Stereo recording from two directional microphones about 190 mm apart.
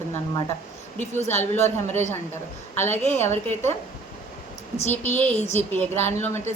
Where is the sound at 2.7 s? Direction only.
10° left (ahead or behind).